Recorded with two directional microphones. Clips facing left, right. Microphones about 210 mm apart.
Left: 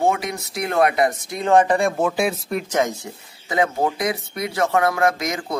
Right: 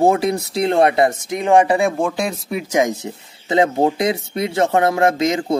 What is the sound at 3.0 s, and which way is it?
Speech, 25° right (ahead or behind).